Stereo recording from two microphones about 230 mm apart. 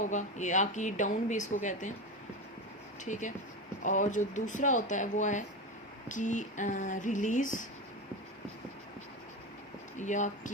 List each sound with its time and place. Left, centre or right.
0.0 s speech: left
3.0 s speech: left
10.0 s speech: left